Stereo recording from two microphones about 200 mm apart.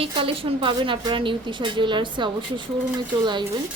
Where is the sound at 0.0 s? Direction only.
25° right (ahead or behind).